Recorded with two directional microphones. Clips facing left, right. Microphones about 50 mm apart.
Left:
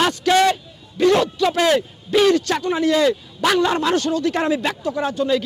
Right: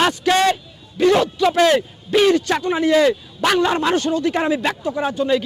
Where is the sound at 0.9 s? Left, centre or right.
Centre.